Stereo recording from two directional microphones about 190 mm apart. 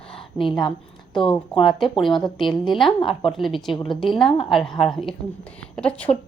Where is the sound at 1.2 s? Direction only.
25° left (ahead or behind).